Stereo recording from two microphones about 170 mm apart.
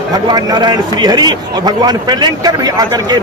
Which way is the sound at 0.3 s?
25° right (ahead or behind).